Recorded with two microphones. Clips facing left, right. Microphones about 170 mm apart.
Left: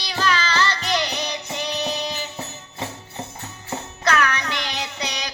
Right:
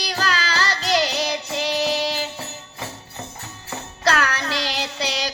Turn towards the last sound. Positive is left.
turn(degrees=-30)  # may be behind; listen again after turning